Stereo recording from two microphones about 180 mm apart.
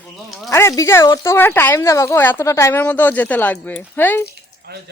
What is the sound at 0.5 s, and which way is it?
Speech, 15° left (ahead or behind).